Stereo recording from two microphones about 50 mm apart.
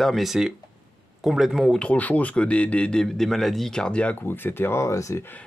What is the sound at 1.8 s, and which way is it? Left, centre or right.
Speech, left.